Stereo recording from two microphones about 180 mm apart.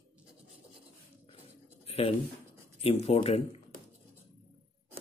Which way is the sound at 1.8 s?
35° left (ahead or behind).